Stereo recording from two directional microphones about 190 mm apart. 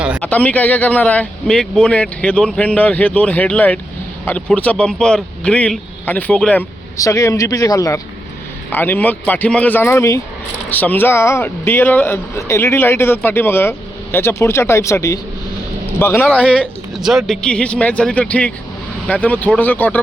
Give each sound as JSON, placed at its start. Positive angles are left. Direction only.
{"t": 0.2, "sound": "a man's voice", "side_deg": 10}